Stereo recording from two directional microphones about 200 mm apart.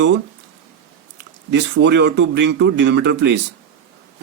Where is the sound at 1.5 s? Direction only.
60° right (ahead or behind).